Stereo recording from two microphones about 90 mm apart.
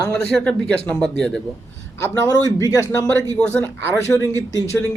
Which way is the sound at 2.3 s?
40° left (ahead or behind).